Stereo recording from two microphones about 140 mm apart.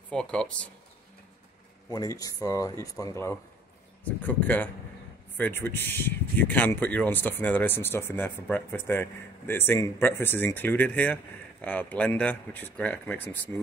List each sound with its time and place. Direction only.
0.1 s speech: 5° left (ahead or behind)
1.9 s speech: 25° left (ahead or behind)
4.0 s speech: 10° left (ahead or behind)